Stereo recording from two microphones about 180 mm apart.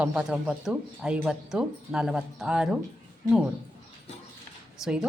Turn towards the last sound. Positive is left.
turn(degrees=-5)  # may be behind; listen again after turning